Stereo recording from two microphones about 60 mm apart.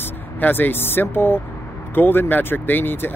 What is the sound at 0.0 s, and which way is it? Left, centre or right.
Speech, left.